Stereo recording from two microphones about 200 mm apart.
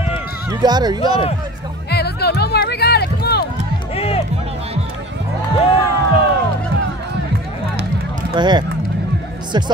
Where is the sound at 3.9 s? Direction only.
30° left (ahead or behind).